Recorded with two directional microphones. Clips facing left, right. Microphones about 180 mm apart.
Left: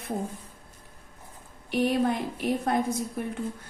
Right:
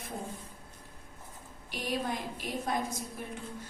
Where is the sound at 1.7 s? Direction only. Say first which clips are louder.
Left 10 dB; 60° left (ahead or behind).